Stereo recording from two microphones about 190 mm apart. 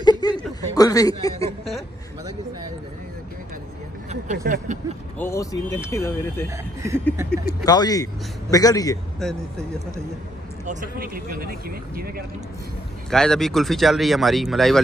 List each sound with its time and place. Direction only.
0.0 s a sound: 20° left (ahead or behind)
0.7 s a man's voice: 20° left (ahead or behind)
4.1 s speech: 40° right (ahead or behind)
5.2 s speech: 15° left (ahead or behind)
6.5 s speech: 15° right (ahead or behind)
7.6 s a man's voice: 20° left (ahead or behind)
9.2 s speech: 5° left (ahead or behind)
10.6 s speech: 45° right (ahead or behind)
13.1 s speech: 5° left (ahead or behind)